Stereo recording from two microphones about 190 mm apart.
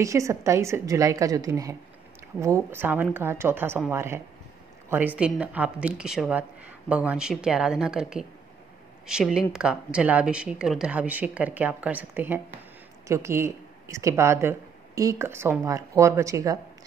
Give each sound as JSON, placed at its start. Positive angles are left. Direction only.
{"t": 0.0, "sound": "a woman's voice", "side_deg": -15}